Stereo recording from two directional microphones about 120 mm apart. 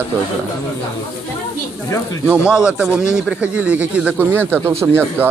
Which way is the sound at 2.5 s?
10° right (ahead or behind).